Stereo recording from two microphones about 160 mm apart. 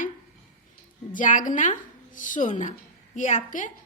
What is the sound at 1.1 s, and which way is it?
A woman's voice, 55° left (ahead or behind).